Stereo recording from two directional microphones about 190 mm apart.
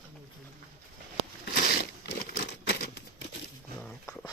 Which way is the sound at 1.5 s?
55° left (ahead or behind).